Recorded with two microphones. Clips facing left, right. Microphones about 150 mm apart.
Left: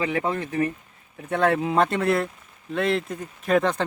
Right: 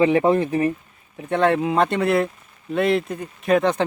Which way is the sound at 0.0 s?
20° right (ahead or behind).